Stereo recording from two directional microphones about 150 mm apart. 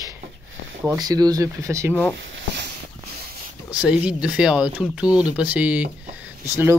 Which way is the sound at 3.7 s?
5° right (ahead or behind).